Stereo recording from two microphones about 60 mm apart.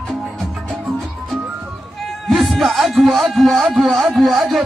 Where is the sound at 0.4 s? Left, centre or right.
Centre.